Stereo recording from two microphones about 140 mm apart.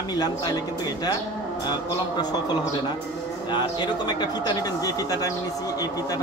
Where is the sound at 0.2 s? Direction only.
30° left (ahead or behind).